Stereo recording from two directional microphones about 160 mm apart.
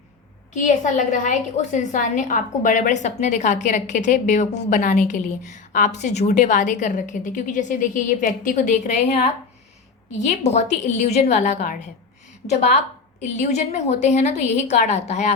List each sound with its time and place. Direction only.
0.5 s a woman's voice: 50° left (ahead or behind)
13.5 s a woman's voice: 45° left (ahead or behind)